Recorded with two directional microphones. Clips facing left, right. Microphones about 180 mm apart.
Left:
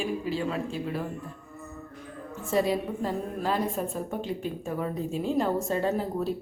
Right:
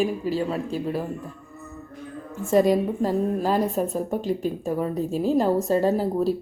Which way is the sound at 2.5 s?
45° right (ahead or behind).